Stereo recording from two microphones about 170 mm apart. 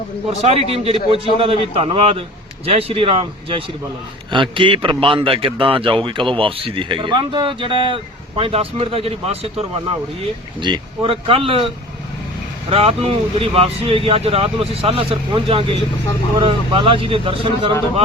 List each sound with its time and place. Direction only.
0.3 s a man's voice: 40° right (ahead or behind)
12.7 s a man's voice: 35° right (ahead or behind)